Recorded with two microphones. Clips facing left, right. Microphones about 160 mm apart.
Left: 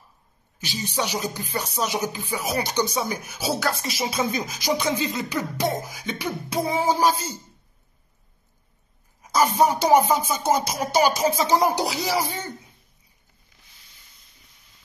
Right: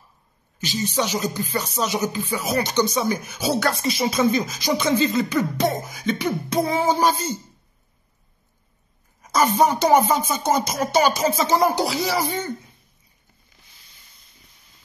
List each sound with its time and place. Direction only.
0.6 s speech: 10° left (ahead or behind)
9.3 s speech: 10° left (ahead or behind)
12.2 s speech: 5° left (ahead or behind)